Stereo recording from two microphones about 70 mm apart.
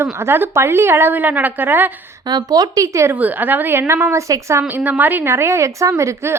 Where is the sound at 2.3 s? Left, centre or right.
Right.